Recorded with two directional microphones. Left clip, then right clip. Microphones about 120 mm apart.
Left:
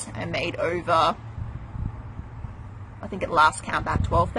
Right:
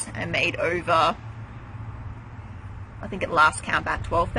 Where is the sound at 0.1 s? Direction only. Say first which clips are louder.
Right 4 dB; 5° left (ahead or behind).